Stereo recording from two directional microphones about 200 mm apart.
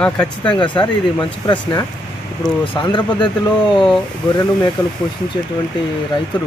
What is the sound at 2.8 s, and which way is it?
Speech, 20° left (ahead or behind).